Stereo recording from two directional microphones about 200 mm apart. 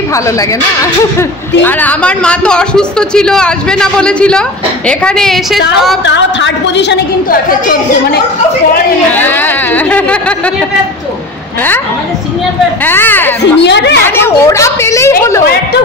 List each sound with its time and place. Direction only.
1.6 s speech: 10° left (ahead or behind)
6.0 s a woman's voice: 65° left (ahead or behind)
9.1 s a woman's voice: 10° left (ahead or behind)
12.8 s a woman's voice: 10° left (ahead or behind)
13.6 s a woman's voice: 60° left (ahead or behind)
14.0 s a woman's voice: 10° left (ahead or behind)